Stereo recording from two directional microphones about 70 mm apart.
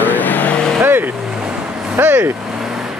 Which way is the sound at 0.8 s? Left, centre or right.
Right.